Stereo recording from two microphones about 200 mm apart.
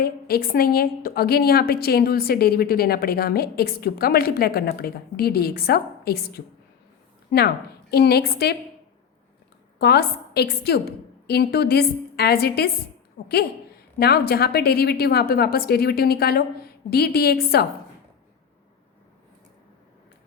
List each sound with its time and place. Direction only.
0.0 s a woman's voice: 50° left (ahead or behind)
9.7 s a woman's voice: 55° left (ahead or behind)